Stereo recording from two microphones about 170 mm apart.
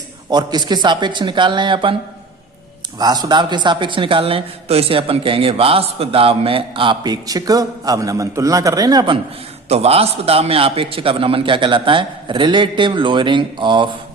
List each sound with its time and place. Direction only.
0.3 s a man's voice: 25° right (ahead or behind)
3.0 s a man's voice: 25° right (ahead or behind)
9.6 s a man's voice: 40° right (ahead or behind)